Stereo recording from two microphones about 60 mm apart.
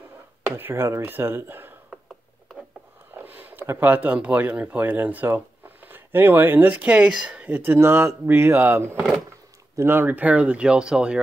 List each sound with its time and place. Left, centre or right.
0.6 s speech: right
3.2 s a sound: right
3.7 s speech: right
6.9 s speech: centre
7.2 s a sound: centre
7.5 s speech: right; by 11.1 s centre